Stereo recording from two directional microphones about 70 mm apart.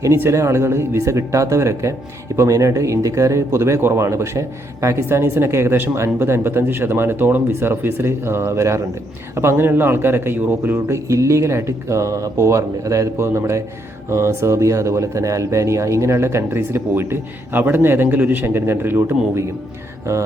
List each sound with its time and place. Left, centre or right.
0.3 s speech: right